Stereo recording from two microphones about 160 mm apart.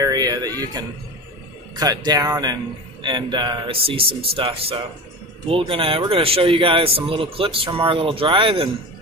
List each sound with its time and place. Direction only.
0.0 s a man's voice: 25° right (ahead or behind)